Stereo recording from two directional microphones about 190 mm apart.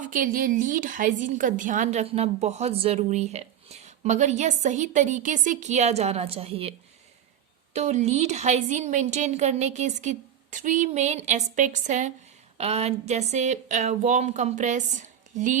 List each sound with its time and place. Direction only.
0.0 s a woman's voice: 45° right (ahead or behind)